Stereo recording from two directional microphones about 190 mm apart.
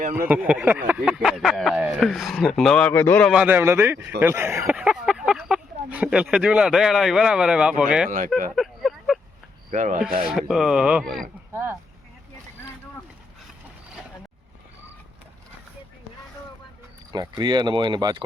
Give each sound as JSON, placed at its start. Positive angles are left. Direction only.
{"t": 0.2, "sound": "speech", "side_deg": -5}
{"t": 3.3, "sound": "a man's voice", "side_deg": -10}
{"t": 8.5, "sound": "a sound", "side_deg": 0}
{"t": 9.7, "sound": "speech", "side_deg": -40}
{"t": 10.2, "sound": "speech", "side_deg": 0}
{"t": 11.5, "sound": "a sound", "side_deg": -10}
{"t": 17.1, "sound": "speech", "side_deg": -20}